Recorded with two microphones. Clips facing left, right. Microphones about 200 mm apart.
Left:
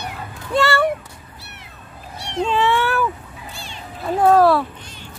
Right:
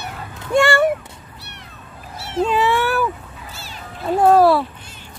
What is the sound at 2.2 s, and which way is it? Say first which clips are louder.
Cat: right 1 dB; 5° right (ahead or behind).